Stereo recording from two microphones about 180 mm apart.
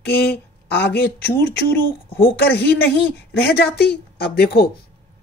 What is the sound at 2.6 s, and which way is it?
Speech, 60° left (ahead or behind).